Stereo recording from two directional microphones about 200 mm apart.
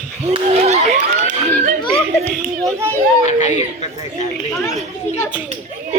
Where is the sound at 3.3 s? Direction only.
35° left (ahead or behind).